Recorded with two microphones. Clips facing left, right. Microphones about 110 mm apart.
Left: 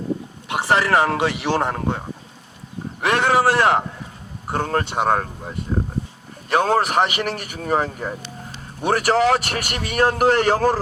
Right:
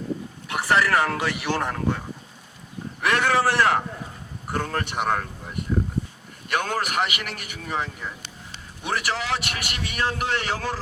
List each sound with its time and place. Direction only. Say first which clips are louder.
0.4 s a man's voice: left 3 dB; 20° left (ahead or behind)
5.2 s a man's voice: left 3 dB; 35° left (ahead or behind)